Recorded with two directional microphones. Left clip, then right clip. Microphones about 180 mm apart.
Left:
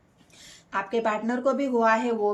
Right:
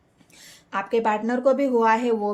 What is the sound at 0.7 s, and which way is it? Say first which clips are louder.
Speech: right 3 dB; 45° right (ahead or behind).